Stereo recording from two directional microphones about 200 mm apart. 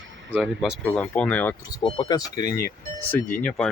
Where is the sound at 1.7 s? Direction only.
25° left (ahead or behind).